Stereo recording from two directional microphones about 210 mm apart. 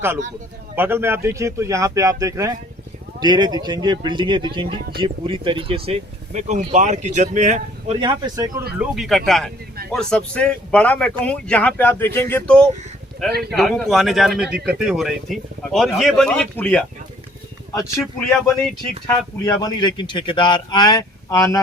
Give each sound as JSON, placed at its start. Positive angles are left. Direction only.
{"t": 0.8, "sound": "speech", "side_deg": -10}
{"t": 8.8, "sound": "speech", "side_deg": 0}
{"t": 19.0, "sound": "speech", "side_deg": 20}